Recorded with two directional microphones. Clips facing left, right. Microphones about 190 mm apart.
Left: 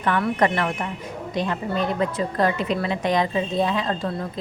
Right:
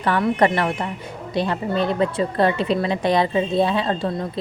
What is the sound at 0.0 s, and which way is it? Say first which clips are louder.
A woman's voice: right 3 dB; 35° right (ahead or behind).